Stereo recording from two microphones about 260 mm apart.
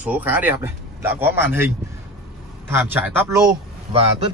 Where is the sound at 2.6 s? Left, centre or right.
Centre.